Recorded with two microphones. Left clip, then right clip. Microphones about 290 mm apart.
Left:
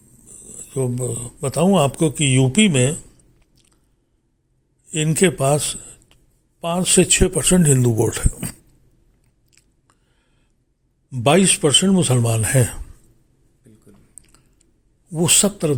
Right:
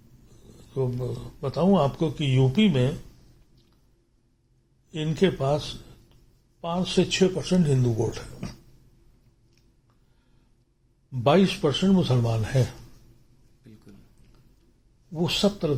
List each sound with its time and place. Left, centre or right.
0.5 s speech: left
4.9 s a man's voice: left
9.5 s biting: left
11.1 s speech: left
14.3 s chewing: left
15.1 s speech: left